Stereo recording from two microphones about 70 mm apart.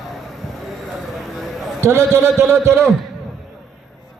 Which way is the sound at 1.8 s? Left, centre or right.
Right.